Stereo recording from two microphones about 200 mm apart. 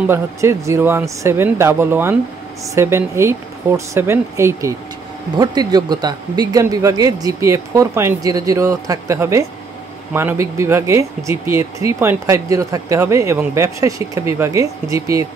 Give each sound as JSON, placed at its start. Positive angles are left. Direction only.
{"t": 0.0, "sound": "speech", "side_deg": -10}